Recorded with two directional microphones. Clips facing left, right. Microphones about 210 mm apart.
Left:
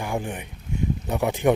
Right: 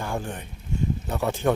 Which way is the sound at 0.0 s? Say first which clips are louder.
Left 2 dB; 15° left (ahead or behind).